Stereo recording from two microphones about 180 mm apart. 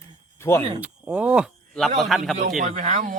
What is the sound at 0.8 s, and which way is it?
Speech, 10° right (ahead or behind).